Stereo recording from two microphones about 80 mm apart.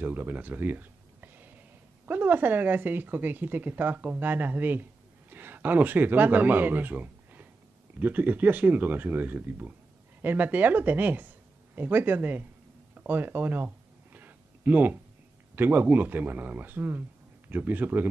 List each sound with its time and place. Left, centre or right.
0.0 s a man's voice: right
12.9 s a sound: right
15.5 s speech: right